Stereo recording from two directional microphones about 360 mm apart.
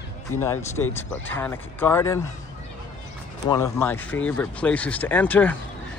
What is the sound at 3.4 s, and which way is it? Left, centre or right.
Speech, centre.